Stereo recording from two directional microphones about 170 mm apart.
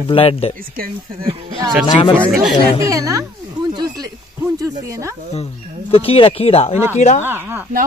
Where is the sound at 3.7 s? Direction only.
25° right (ahead or behind).